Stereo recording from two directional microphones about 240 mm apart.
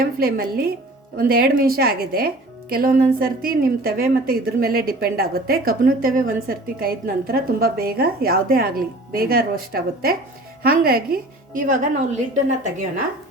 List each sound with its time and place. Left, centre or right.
0.0 s speech: right